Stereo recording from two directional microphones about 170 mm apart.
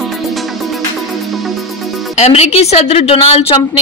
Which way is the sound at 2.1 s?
40° left (ahead or behind).